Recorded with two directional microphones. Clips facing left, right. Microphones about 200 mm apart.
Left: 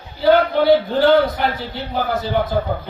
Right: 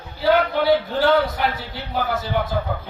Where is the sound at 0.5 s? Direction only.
35° left (ahead or behind).